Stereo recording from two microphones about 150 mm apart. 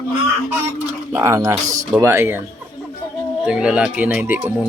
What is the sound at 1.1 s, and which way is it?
Speech, 20° right (ahead or behind).